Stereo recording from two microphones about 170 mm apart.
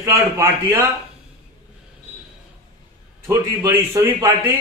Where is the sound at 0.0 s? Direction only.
15° right (ahead or behind).